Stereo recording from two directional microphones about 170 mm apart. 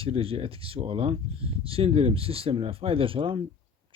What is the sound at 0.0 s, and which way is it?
Speech, 35° right (ahead or behind).